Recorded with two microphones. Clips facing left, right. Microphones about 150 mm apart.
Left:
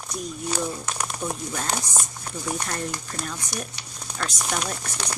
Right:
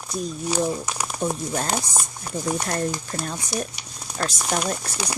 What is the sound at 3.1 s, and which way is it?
Speech, 35° right (ahead or behind).